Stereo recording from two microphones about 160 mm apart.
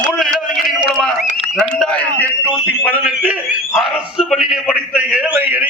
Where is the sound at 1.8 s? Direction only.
10° left (ahead or behind).